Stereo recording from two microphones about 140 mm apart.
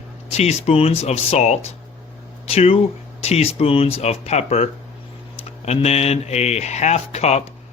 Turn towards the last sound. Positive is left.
turn(degrees=50)  # may be behind; listen again after turning